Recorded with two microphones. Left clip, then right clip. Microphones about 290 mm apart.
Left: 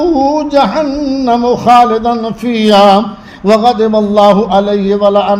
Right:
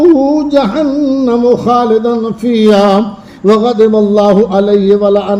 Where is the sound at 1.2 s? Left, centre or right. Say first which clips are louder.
Left 2 dB; centre.